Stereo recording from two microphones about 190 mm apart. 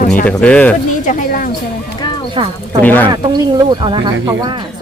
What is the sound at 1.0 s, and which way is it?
Speech, 45° left (ahead or behind).